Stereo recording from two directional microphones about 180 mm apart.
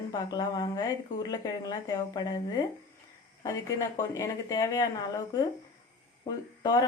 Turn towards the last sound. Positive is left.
turn(degrees=20)  # may be behind; listen again after turning